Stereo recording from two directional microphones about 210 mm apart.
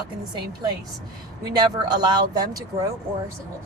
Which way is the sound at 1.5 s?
20° right (ahead or behind).